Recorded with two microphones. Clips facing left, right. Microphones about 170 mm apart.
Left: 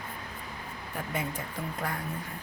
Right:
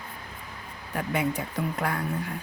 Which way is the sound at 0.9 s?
75° right (ahead or behind).